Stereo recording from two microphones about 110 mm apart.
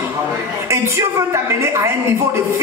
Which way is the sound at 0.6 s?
25° right (ahead or behind).